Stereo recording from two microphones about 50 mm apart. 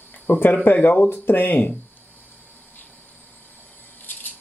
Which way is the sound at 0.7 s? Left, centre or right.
Left.